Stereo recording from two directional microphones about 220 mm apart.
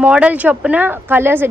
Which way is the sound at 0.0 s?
5° right (ahead or behind).